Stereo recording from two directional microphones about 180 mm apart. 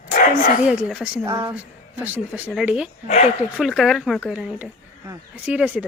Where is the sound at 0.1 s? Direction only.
45° left (ahead or behind).